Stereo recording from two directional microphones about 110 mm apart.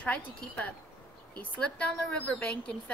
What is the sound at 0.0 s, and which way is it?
A woman's voice, 10° left (ahead or behind).